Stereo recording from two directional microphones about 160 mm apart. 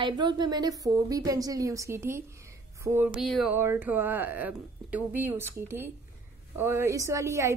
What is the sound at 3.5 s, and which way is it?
A woman's voice, 15° right (ahead or behind).